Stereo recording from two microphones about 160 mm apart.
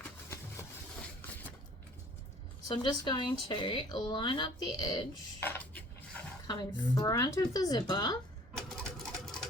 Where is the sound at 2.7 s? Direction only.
25° left (ahead or behind).